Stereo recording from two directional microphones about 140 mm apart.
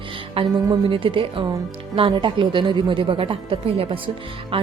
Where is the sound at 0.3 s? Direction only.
40° right (ahead or behind).